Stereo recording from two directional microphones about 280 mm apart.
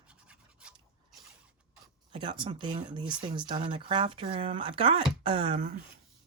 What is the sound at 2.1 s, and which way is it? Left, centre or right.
Speech, centre.